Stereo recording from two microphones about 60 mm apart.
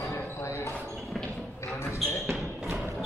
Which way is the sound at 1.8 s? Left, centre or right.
Left.